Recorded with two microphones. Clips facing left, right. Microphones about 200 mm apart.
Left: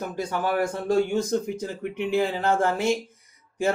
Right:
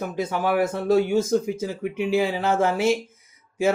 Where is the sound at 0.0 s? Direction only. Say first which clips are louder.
Right 2 dB; 10° right (ahead or behind).